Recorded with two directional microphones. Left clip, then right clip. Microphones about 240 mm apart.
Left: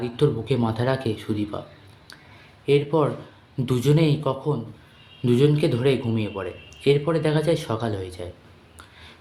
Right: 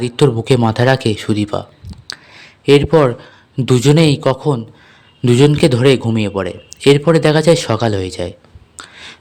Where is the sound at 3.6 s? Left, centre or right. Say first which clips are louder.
Right 10 dB; right.